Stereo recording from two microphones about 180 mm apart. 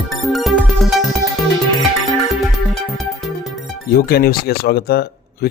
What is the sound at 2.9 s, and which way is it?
Music, centre (ahead or behind).